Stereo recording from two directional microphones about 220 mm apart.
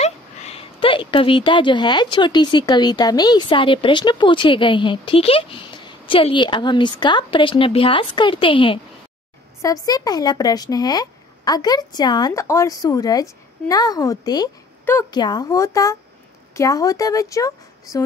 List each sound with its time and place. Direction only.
0.0 s speech: 25° left (ahead or behind)